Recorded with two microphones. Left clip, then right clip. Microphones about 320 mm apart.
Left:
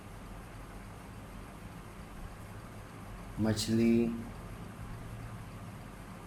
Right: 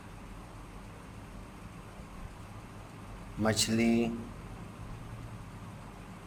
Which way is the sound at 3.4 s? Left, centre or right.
Right.